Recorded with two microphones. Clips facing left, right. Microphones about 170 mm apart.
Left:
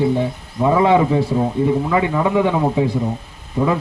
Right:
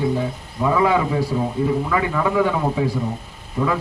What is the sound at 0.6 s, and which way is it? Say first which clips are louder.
Speech: left 4 dB; 25° left (ahead or behind).